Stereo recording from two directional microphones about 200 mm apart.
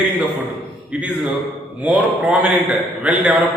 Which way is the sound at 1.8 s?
5° right (ahead or behind).